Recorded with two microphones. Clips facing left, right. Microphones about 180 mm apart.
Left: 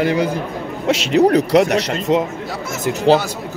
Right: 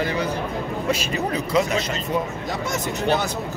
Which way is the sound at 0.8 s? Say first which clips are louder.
Left 13 dB; 85° left.